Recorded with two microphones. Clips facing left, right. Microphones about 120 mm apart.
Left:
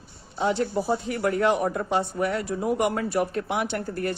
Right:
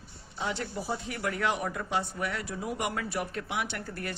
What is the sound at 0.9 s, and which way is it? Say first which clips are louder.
Speech: left 8 dB; 40° left (ahead or behind).